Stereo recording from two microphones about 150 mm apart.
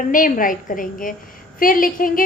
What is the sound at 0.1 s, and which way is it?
A woman's voice, 60° left (ahead or behind).